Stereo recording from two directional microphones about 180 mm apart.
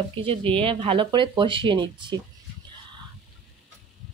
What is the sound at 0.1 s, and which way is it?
Speech, 30° right (ahead or behind).